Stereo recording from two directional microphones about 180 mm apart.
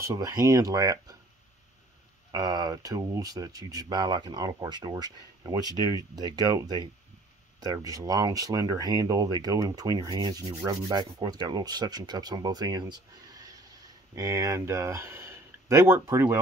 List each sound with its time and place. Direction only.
0.0 s speech: 20° right (ahead or behind)
2.3 s speech: 25° right (ahead or behind)